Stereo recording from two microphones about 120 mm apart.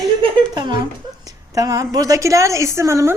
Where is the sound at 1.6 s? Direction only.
30° right (ahead or behind).